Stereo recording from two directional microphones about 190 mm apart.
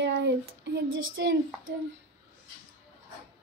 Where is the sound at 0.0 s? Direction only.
65° right (ahead or behind).